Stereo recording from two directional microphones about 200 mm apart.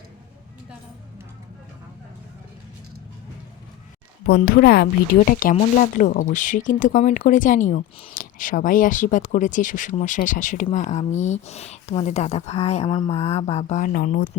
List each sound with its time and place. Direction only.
4.3 s speech: 50° left (ahead or behind)